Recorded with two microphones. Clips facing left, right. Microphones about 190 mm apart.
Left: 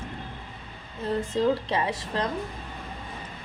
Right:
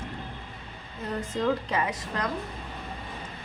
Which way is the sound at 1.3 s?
30° left (ahead or behind).